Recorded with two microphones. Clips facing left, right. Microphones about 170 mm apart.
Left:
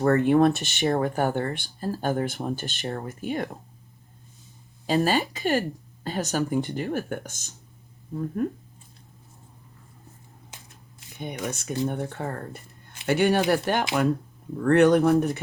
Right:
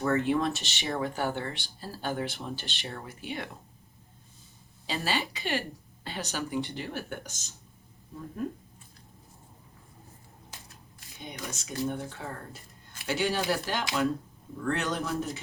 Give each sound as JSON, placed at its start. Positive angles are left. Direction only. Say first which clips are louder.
{"t": 0.0, "sound": "speech", "louder": "left 8 dB", "side_deg": 55}
{"t": 4.9, "sound": "speech", "louder": "left 9 dB", "side_deg": 45}
{"t": 11.2, "sound": "speech", "louder": "left 8 dB", "side_deg": 55}